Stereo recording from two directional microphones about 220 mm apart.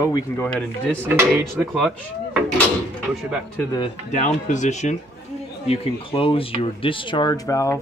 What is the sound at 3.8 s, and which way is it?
Speech, 30° left (ahead or behind).